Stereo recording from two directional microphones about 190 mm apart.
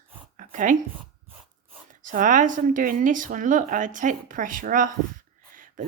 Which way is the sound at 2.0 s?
45° right (ahead or behind).